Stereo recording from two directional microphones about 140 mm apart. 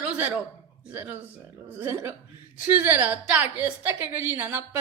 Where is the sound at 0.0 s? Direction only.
10° right (ahead or behind).